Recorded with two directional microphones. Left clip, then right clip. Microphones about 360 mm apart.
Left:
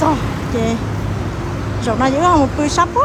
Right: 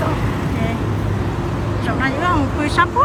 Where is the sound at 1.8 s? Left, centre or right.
Centre.